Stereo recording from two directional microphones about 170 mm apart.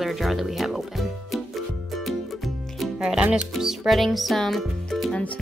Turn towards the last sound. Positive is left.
turn(degrees=5)  # may be behind; listen again after turning